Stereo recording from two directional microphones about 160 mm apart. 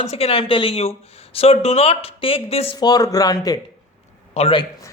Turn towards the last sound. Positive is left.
turn(degrees=35)  # may be behind; listen again after turning